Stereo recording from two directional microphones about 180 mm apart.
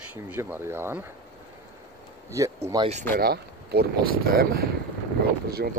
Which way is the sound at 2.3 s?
15° right (ahead or behind).